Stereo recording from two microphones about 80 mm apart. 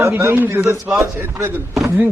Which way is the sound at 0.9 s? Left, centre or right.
Centre.